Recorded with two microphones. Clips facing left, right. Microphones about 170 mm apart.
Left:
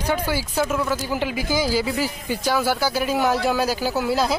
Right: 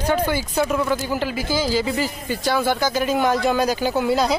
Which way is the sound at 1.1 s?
15° left (ahead or behind).